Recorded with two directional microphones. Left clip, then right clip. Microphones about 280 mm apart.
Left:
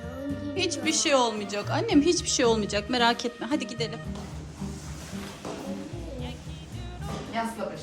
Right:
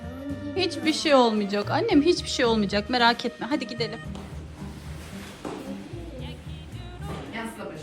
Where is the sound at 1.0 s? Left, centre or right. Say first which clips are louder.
Right 5 dB; centre.